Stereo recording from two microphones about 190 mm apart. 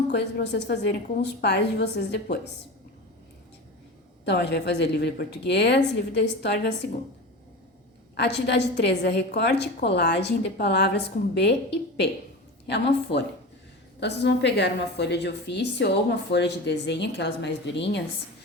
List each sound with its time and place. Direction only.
0.1 s a woman's voice: 65° left (ahead or behind)
4.3 s a woman's voice: 65° left (ahead or behind)
8.1 s a woman's voice: 65° left (ahead or behind)